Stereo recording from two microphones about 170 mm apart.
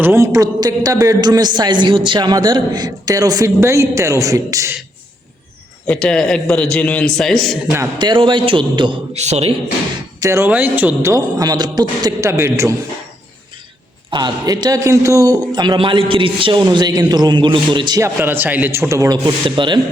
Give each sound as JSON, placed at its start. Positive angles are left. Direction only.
{"t": 0.0, "sound": "a man's voice", "side_deg": -15}
{"t": 5.8, "sound": "a man's voice", "side_deg": 5}
{"t": 7.9, "sound": "a man's voice", "side_deg": -30}
{"t": 9.1, "sound": "a man's voice", "side_deg": -40}
{"t": 10.2, "sound": "a man's voice", "side_deg": -15}
{"t": 14.1, "sound": "a man's voice", "side_deg": -25}